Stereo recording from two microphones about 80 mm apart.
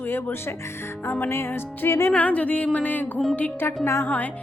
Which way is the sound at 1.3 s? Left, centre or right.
Left.